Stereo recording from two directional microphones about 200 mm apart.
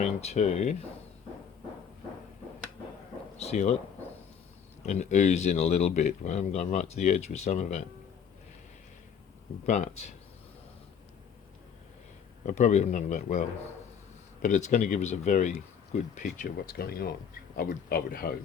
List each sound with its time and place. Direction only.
0.0 s speech: 35° left (ahead or behind)
3.3 s speech: 35° left (ahead or behind)
4.9 s speech: 35° left (ahead or behind)
9.6 s speech: 35° left (ahead or behind)
12.5 s speech: 35° left (ahead or behind)
14.4 s speech: 40° left (ahead or behind)